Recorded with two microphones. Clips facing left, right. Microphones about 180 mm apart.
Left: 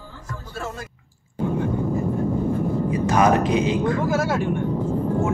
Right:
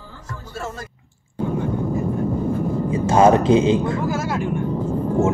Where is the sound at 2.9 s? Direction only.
25° right (ahead or behind).